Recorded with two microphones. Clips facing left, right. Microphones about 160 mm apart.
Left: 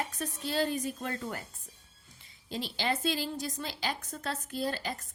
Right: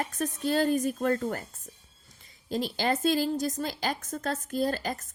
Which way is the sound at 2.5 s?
45° right (ahead or behind).